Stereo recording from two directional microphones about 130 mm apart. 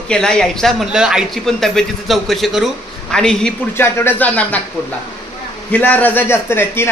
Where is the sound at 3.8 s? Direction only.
15° left (ahead or behind).